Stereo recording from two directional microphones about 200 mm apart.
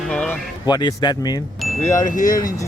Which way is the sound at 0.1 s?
5° left (ahead or behind).